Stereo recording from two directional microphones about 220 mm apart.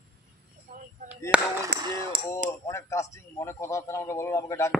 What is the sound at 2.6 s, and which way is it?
A man's voice, 15° left (ahead or behind).